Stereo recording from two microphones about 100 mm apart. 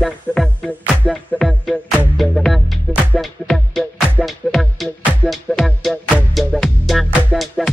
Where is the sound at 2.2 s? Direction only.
Centre (ahead or behind).